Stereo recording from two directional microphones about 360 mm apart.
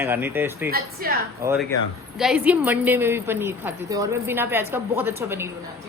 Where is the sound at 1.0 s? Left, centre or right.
Right.